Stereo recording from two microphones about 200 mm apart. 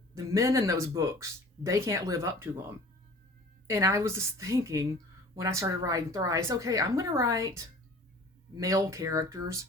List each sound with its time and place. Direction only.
0.1 s speech: 15° right (ahead or behind)